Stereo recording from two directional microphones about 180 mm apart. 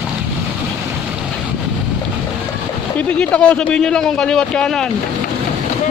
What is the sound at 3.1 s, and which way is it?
Speech, 5° left (ahead or behind).